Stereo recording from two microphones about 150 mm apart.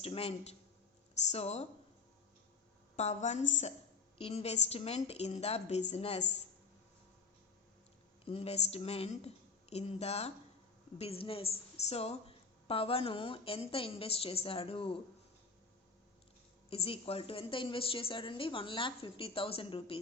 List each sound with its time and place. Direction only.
0.0 s a woman's voice: 40° left (ahead or behind)
2.9 s a woman's voice: 50° left (ahead or behind)
4.2 s a woman's voice: 40° left (ahead or behind)
8.2 s a woman's voice: 40° left (ahead or behind)
16.6 s a woman's voice: 40° left (ahead or behind)